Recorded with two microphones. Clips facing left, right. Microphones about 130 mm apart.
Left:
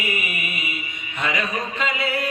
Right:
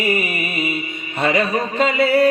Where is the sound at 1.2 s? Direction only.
35° right (ahead or behind).